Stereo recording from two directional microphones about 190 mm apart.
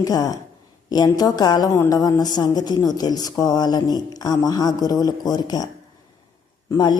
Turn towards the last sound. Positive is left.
turn(degrees=20)  # may be behind; listen again after turning